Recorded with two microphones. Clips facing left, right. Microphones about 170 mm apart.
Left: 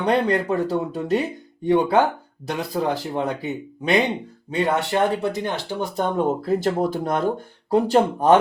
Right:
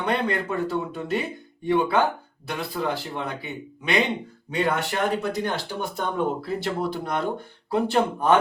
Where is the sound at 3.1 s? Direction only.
40° left (ahead or behind).